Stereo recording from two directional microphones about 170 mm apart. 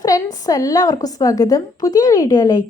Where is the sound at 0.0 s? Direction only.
20° left (ahead or behind).